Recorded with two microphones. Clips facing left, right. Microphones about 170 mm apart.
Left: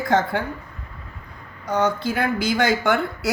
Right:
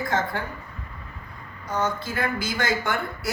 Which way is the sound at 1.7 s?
65° left (ahead or behind).